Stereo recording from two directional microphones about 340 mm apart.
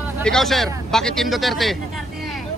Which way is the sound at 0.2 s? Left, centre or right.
Centre.